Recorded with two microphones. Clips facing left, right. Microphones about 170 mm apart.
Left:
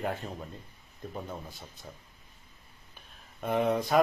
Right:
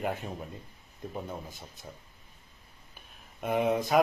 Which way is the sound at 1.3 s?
15° right (ahead or behind).